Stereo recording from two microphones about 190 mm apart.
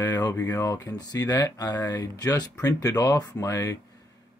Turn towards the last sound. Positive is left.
turn(degrees=15)  # may be behind; listen again after turning